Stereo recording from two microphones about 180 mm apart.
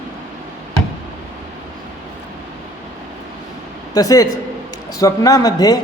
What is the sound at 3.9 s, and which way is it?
A man's voice, 20° left (ahead or behind).